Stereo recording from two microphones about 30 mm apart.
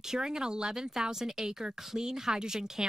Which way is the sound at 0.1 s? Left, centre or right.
Right.